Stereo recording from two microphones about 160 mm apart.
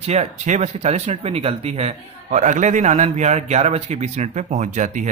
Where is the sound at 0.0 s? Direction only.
40° right (ahead or behind).